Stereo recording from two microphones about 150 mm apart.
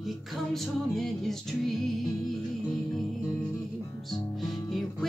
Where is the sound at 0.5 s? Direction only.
Centre (ahead or behind).